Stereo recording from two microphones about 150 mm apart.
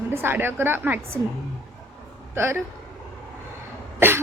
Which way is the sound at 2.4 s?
15° right (ahead or behind).